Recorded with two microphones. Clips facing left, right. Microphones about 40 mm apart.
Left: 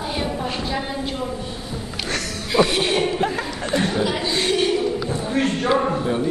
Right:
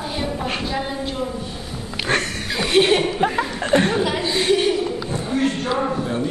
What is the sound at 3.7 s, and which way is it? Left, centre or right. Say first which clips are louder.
Speech: right 5 dB; right.